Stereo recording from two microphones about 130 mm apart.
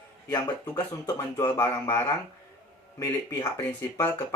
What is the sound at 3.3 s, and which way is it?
Speech, 15° left (ahead or behind).